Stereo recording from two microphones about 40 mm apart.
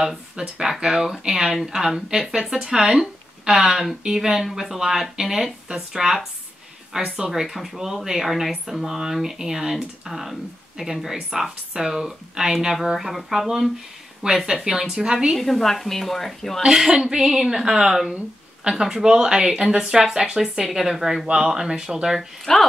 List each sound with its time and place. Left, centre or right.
0.4 s speech: centre
7.2 s speech: centre
15.3 s a woman's voice: centre
16.6 s speech: centre
22.5 s a woman's voice: centre